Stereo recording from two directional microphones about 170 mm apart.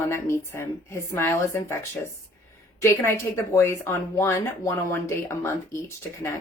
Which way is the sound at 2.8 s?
15° left (ahead or behind).